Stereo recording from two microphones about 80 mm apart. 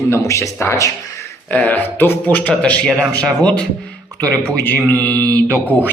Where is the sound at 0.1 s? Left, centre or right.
Left.